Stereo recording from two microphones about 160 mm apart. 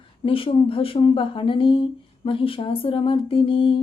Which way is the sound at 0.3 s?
35° left (ahead or behind).